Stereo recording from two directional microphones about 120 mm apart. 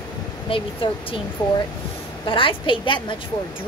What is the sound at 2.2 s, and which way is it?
Speech, 45° left (ahead or behind).